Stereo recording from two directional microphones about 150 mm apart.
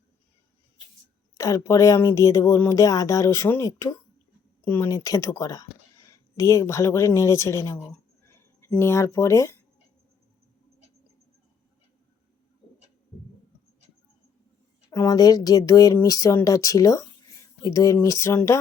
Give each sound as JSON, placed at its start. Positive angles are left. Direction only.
{"t": 1.4, "sound": "speech", "side_deg": 20}
{"t": 14.8, "sound": "speech", "side_deg": 25}